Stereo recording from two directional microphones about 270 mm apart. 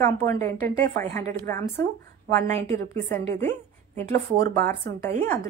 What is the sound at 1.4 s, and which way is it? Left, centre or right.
Speech, centre.